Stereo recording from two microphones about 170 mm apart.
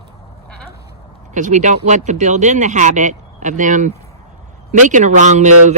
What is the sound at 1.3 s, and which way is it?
Speech, 45° right (ahead or behind).